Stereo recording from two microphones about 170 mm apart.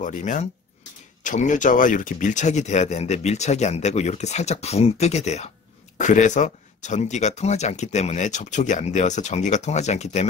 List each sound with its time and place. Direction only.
0.0 s speech: 45° left (ahead or behind)